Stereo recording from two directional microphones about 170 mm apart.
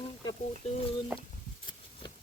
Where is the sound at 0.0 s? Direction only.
35° left (ahead or behind).